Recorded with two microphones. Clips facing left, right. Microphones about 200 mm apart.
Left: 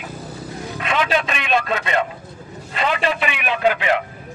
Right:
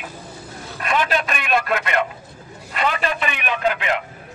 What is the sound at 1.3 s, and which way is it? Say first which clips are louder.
Speech: even; 25° left (ahead or behind).